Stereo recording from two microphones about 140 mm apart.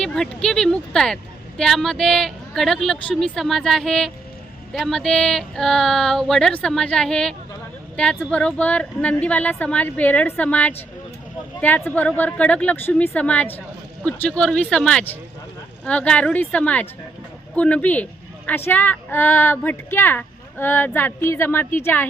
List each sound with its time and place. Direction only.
0.0 s a woman's voice: 5° left (ahead or behind)